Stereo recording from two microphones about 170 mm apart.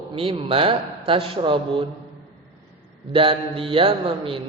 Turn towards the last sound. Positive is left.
turn(degrees=-30)  # may be behind; listen again after turning